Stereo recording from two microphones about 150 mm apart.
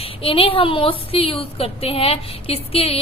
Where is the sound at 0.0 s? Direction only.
40° left (ahead or behind).